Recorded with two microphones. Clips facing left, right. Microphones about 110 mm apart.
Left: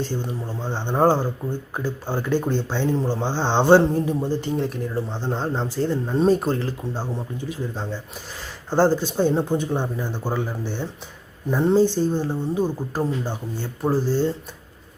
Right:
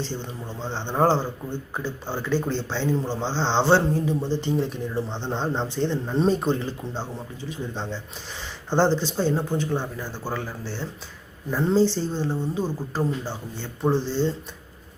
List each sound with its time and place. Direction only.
0.1 s speech: 10° left (ahead or behind)
4.4 s speech: centre (ahead or behind)